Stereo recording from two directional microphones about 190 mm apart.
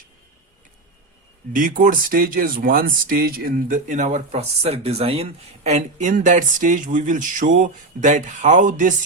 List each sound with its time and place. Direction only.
1.5 s speech: 45° right (ahead or behind)